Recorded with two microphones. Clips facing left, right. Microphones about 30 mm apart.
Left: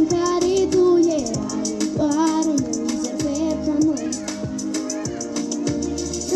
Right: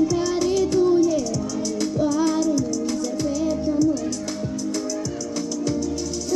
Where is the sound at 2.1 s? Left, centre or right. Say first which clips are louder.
Left 3 dB; left.